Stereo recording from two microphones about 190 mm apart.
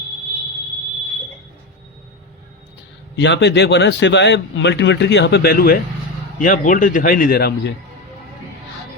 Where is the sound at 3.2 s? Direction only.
70° left (ahead or behind).